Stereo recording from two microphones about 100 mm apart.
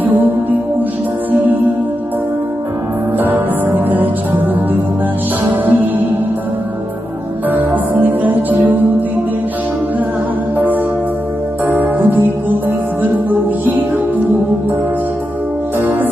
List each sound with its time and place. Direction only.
3.2 s music: 20° right (ahead or behind)
5.6 s music: 20° right (ahead or behind)
7.5 s music: 15° right (ahead or behind)
11.6 s music: 20° right (ahead or behind)
15.8 s music: 15° right (ahead or behind)